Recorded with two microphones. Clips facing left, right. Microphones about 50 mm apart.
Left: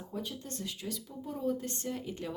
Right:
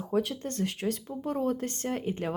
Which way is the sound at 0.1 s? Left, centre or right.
Right.